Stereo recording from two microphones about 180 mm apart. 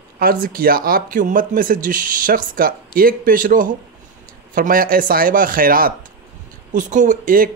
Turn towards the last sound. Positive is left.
turn(degrees=-50)  # may be behind; listen again after turning